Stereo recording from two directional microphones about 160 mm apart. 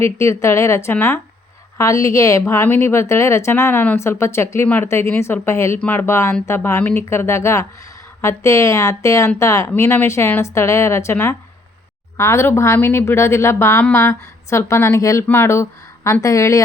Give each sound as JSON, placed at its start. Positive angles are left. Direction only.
{"t": 0.0, "sound": "a woman's voice", "side_deg": 15}